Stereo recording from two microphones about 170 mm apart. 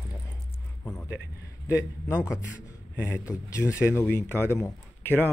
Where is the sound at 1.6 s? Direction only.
15° left (ahead or behind).